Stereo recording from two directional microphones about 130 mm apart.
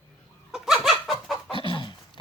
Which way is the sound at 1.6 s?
40° left (ahead or behind).